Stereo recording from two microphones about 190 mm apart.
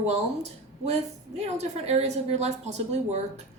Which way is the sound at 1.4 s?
35° right (ahead or behind).